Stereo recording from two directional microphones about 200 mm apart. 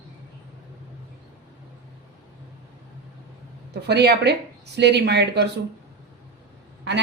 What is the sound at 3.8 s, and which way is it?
Speech, 55° right (ahead or behind).